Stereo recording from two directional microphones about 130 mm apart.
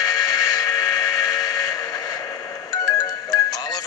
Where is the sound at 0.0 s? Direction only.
30° left (ahead or behind).